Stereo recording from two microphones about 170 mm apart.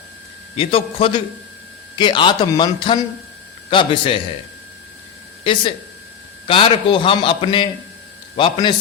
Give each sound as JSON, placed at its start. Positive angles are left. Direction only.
{"t": 0.5, "sound": "a man's voice", "side_deg": 35}
{"t": 5.4, "sound": "a man's voice", "side_deg": 30}